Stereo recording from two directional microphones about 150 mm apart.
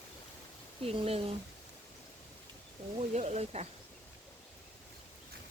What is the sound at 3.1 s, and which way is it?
Speech, 45° right (ahead or behind).